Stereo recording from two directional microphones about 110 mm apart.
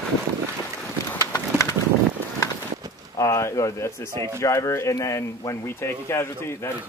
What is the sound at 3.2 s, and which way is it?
Speech, 30° left (ahead or behind).